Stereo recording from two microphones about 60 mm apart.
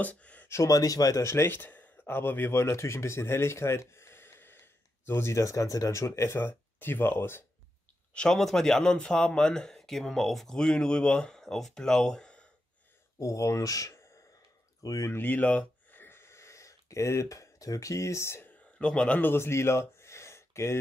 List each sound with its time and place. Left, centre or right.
0.0 s speech: left
0.5 s speech: left
1.2 s speech: left
8.1 s a man's voice: centre
13.2 s speech: left
15.0 s a sound: left
18.8 s a man's voice: centre
19.3 s a sound: left